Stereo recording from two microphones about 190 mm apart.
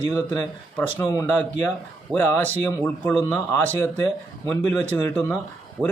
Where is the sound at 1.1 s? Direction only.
15° left (ahead or behind).